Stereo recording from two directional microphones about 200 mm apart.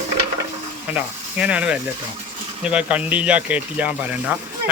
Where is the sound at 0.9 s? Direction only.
5° right (ahead or behind).